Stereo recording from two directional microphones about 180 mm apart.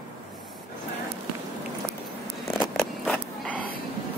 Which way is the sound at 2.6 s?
Centre (ahead or behind).